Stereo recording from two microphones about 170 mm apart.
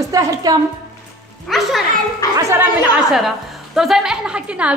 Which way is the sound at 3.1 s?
Centre (ahead or behind).